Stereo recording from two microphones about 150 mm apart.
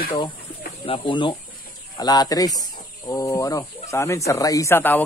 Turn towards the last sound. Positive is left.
turn(degrees=15)  # may be behind; listen again after turning